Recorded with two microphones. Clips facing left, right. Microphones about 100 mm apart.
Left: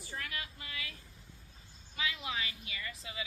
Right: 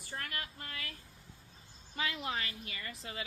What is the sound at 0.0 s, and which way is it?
Vehicle, 50° right (ahead or behind).